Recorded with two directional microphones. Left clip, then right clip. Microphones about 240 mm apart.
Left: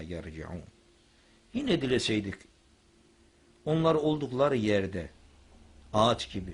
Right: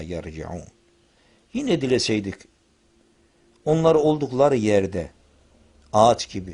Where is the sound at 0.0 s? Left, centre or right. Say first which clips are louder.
Right 8 dB; right.